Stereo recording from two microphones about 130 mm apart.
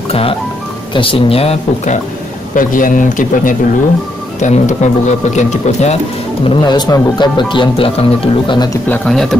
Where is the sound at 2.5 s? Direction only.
90° left.